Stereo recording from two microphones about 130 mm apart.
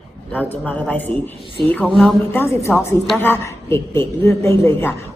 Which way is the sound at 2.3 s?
20° left (ahead or behind).